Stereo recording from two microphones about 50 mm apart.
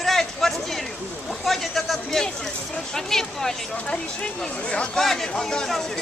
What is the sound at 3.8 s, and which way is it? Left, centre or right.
Speech, left.